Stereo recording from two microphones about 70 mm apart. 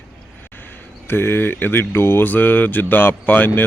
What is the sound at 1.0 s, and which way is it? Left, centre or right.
Speech, left.